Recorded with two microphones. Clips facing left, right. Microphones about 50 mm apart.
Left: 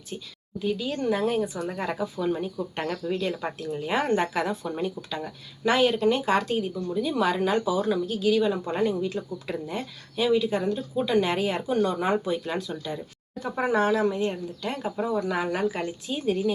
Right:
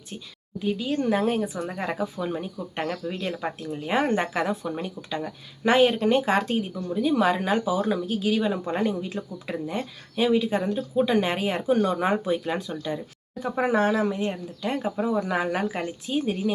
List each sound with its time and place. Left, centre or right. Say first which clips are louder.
0.1 s speech: left 2 dB; centre
0.6 s speech: right 2 dB; right
1.0 s speech: even; right
1.5 s speech: right 1 dB; centre
3.9 s speech: right 1 dB; centre
5.6 s speech: right 2 dB; right
6.7 s speech: right 2 dB; centre
8.4 s speech: even; centre
8.8 s speech: left 1 dB; right
15.2 s speech: even; right